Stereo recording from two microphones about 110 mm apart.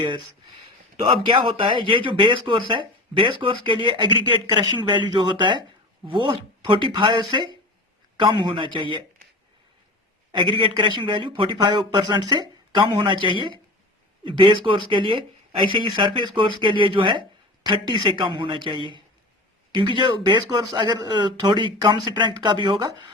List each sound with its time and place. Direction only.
0.9 s speech: 55° right (ahead or behind)
10.3 s speech: 50° right (ahead or behind)
14.3 s speech: 50° right (ahead or behind)